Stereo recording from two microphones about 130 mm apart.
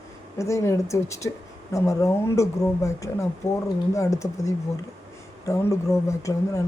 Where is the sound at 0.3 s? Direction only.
20° left (ahead or behind).